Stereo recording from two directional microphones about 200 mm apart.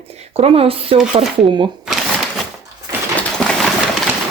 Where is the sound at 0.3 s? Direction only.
30° right (ahead or behind).